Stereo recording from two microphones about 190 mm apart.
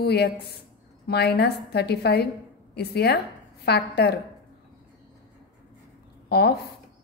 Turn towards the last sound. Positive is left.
turn(degrees=55)  # may be behind; listen again after turning